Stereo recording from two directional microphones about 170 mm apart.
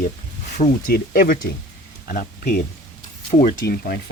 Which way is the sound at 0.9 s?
60° left (ahead or behind).